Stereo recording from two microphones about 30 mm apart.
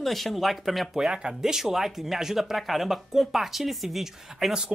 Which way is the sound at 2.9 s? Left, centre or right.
Centre.